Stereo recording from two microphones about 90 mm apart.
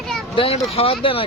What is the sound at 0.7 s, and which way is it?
Speech, 90° left.